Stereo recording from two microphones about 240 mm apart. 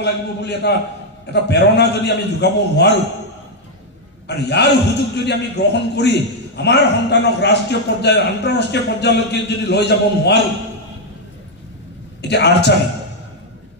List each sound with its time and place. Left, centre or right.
0.0 s a man's voice: left
4.3 s a man's voice: left
12.2 s a man's voice: left